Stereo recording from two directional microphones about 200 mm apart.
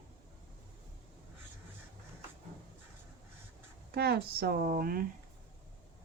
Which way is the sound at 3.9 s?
50° right (ahead or behind).